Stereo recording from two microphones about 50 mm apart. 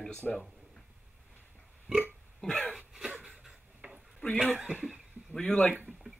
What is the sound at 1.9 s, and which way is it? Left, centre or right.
Burping, centre.